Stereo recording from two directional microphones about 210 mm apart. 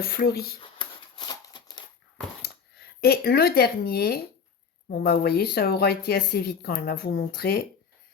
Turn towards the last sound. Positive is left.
turn(degrees=45)  # may be behind; listen again after turning